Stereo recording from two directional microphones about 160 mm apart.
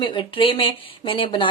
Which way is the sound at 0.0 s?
30° left (ahead or behind).